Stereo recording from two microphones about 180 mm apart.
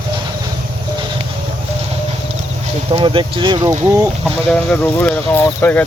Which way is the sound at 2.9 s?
30° right (ahead or behind).